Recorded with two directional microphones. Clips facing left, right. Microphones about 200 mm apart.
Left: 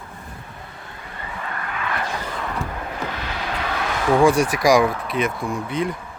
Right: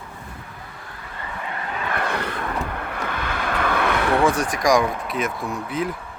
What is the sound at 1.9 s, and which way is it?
Vehicle, 60° right (ahead or behind).